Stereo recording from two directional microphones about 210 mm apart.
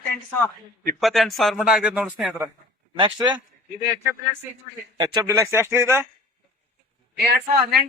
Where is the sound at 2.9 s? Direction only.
25° right (ahead or behind).